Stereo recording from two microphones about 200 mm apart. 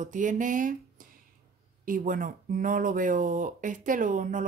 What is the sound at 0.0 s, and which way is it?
Speech, 40° right (ahead or behind).